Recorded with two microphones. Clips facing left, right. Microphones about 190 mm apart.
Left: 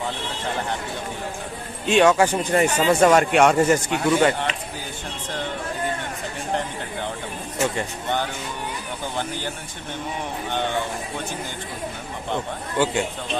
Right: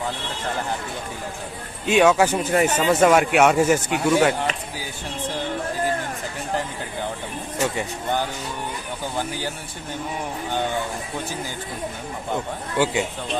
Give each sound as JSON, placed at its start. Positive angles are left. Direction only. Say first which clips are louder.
{"t": 1.9, "sound": "speech", "louder": "even", "side_deg": -5}
{"t": 12.3, "sound": "speech", "louder": "even", "side_deg": -10}